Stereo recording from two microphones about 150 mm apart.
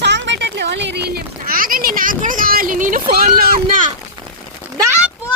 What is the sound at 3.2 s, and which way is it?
Speech, 75° right (ahead or behind).